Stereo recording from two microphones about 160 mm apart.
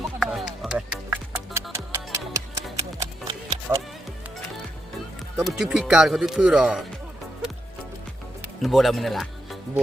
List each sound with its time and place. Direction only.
0.0 s music: centre (ahead or behind); by 3.8 s 30° right (ahead or behind)
5.4 s speech: centre (ahead or behind)
8.6 s speech: centre (ahead or behind)